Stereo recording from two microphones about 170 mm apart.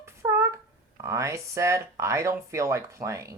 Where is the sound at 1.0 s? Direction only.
15° right (ahead or behind).